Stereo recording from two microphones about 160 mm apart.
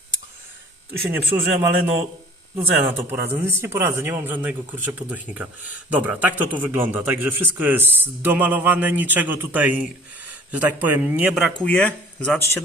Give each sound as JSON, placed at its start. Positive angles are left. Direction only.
{"t": 1.1, "sound": "a man's voice", "side_deg": -15}
{"t": 11.6, "sound": "speech", "side_deg": 10}